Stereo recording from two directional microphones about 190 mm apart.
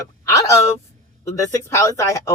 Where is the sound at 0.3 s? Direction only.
15° left (ahead or behind).